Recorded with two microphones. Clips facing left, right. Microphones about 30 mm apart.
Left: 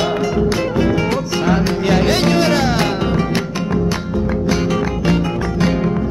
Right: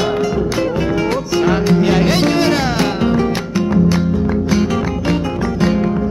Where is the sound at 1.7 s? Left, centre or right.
Centre.